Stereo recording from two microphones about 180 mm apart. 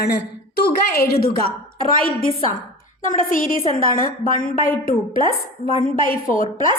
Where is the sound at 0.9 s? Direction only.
60° left (ahead or behind).